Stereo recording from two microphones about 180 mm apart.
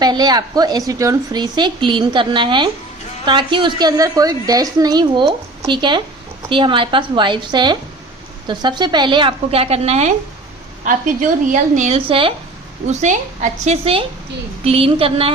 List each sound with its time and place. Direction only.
0.0 s a woman's voice: 20° right (ahead or behind)
12.9 s a woman's voice: 40° right (ahead or behind)